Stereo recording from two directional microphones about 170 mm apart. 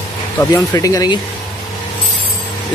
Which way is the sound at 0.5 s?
20° left (ahead or behind).